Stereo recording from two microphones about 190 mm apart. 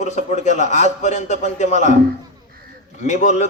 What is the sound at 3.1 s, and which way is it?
Speech, 40° left (ahead or behind).